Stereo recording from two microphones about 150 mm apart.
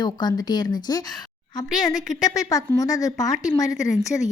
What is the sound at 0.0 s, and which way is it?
A woman's voice, 30° left (ahead or behind).